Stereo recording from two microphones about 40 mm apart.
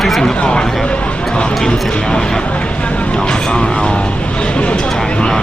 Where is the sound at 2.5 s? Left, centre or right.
Left.